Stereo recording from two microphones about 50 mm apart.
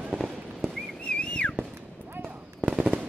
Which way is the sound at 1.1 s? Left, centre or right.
Left.